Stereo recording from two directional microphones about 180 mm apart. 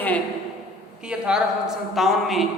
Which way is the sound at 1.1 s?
5° right (ahead or behind).